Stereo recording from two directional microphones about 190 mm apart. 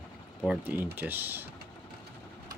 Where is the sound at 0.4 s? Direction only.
5° right (ahead or behind).